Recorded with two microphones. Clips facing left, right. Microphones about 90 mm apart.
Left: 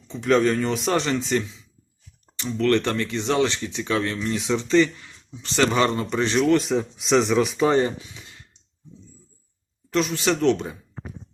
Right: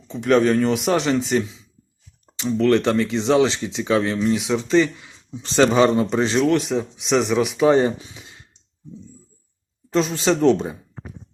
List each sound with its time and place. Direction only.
0.1 s speech: 5° right (ahead or behind)
2.4 s speech: 10° right (ahead or behind)
7.8 s speech: 25° right (ahead or behind)
9.9 s speech: 25° right (ahead or behind)